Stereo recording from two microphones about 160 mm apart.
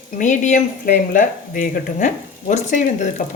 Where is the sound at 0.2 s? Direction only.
50° left (ahead or behind).